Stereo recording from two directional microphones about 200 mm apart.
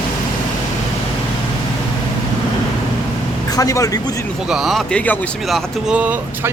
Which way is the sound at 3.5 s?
15° left (ahead or behind).